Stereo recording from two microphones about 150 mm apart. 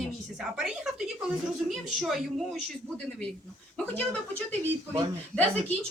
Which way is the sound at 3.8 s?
10° left (ahead or behind).